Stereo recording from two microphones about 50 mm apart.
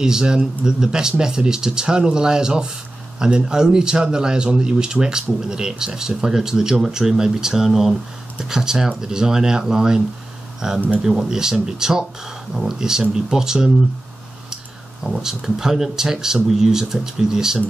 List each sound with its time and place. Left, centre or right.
0.0 s speech: centre
15.0 s speech: centre